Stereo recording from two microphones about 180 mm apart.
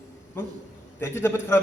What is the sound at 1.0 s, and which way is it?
Speech, 15° left (ahead or behind).